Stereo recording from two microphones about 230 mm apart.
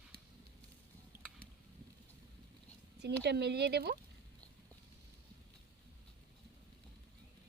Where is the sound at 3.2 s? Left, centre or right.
Right.